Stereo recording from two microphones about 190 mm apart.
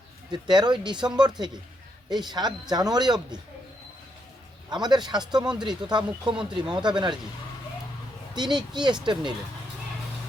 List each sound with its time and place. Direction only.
0.3 s speech: 25° right (ahead or behind)
4.7 s speech: 25° right (ahead or behind)
6.3 s speech: 5° right (ahead or behind)
6.7 s speech: 25° right (ahead or behind)
8.4 s speech: 25° right (ahead or behind)